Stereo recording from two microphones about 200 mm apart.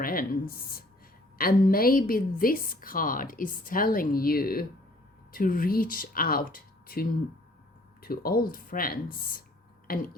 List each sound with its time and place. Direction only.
0.0 s a woman's voice: 45° left (ahead or behind)